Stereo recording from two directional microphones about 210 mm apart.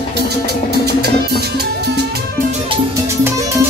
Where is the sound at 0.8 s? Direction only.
50° right (ahead or behind).